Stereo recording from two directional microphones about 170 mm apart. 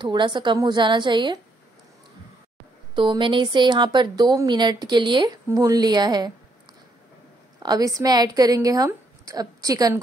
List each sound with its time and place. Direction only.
0.0 s speech: 25° right (ahead or behind)
2.9 s speech: 30° right (ahead or behind)
7.6 s speech: 20° right (ahead or behind)